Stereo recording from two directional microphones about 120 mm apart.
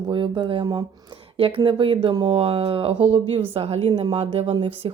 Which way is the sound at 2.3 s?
60° right (ahead or behind).